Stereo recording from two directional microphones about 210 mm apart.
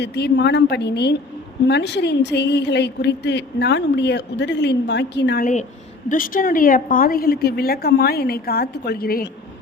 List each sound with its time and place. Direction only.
0.0 s a woman's voice: 55° left (ahead or behind)
6.1 s a woman's voice: 40° left (ahead or behind)